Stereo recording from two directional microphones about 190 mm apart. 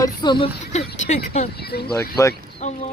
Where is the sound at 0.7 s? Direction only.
35° left (ahead or behind).